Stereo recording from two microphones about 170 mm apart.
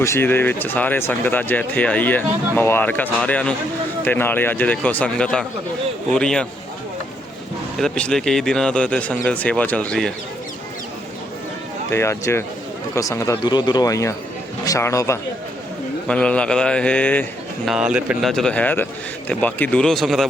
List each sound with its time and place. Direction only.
0.0 s speech: 15° left (ahead or behind)
7.8 s speech: 5° left (ahead or behind)
11.9 s speech: 15° left (ahead or behind)
16.0 s speech: 5° left (ahead or behind)
17.7 s speech: 5° right (ahead or behind)